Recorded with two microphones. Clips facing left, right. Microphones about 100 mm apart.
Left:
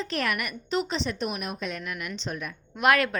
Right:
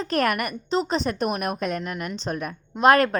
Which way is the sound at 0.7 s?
35° right (ahead or behind).